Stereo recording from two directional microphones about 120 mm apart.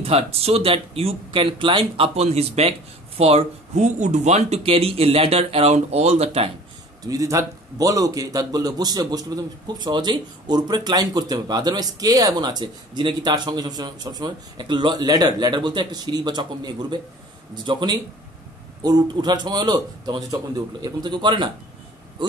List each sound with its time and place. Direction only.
0.0 s speech: 55° right (ahead or behind)
2.1 s speech: 65° right (ahead or behind)
7.1 s a man's voice: 30° right (ahead or behind)
17.6 s a man's voice: 40° right (ahead or behind)